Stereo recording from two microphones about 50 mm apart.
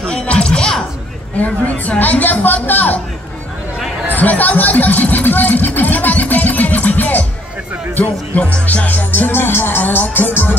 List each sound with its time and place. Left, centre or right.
0.0 s music: centre
1.4 s music: left
4.1 s music: left
8.4 s music: left